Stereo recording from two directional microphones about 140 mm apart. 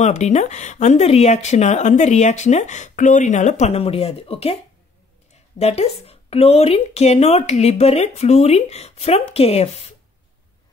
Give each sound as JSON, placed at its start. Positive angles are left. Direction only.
{"t": 0.0, "sound": "a woman's voice", "side_deg": 55}